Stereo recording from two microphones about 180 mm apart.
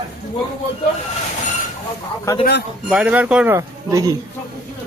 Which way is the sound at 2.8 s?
5° right (ahead or behind).